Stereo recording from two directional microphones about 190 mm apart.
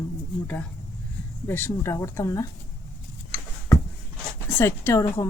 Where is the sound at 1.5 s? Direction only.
10° left (ahead or behind).